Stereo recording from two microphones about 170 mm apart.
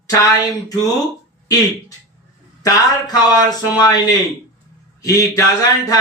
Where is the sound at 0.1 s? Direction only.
20° left (ahead or behind).